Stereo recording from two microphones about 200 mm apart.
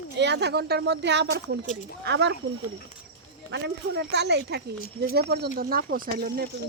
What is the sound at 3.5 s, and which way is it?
Speech, 55° right (ahead or behind).